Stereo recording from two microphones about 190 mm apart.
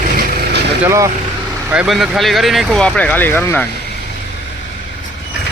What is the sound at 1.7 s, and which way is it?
Speech, 5° right (ahead or behind).